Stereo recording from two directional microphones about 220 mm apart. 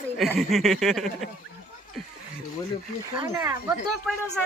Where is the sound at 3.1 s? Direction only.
15° right (ahead or behind).